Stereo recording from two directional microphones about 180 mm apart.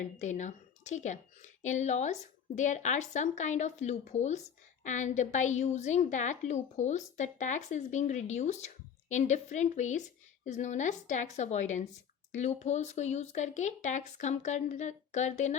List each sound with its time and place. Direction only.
0.2 s a woman's voice: 40° left (ahead or behind)